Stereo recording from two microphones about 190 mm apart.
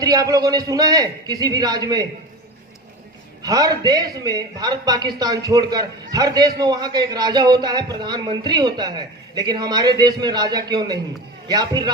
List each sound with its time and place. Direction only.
0.0 s a man's voice: 20° right (ahead or behind)
3.4 s a man's voice: 20° right (ahead or behind)